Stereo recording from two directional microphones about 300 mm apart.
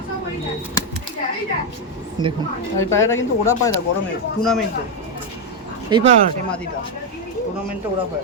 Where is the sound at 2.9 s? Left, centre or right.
Centre.